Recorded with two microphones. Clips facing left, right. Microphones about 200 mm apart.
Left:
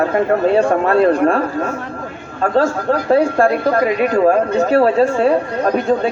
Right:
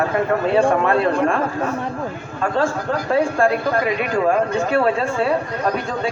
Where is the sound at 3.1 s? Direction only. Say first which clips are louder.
Left 4 dB; 40° left (ahead or behind).